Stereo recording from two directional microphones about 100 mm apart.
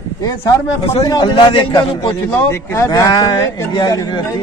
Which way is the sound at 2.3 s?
25° left (ahead or behind).